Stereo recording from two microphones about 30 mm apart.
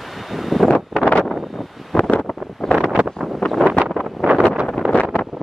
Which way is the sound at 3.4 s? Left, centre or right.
Left.